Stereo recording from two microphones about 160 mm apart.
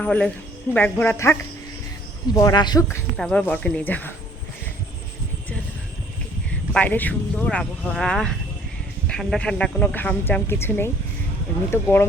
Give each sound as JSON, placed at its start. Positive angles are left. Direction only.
{"t": 0.0, "sound": "speech", "side_deg": 5}
{"t": 3.2, "sound": "speech", "side_deg": 5}
{"t": 6.7, "sound": "speech", "side_deg": 10}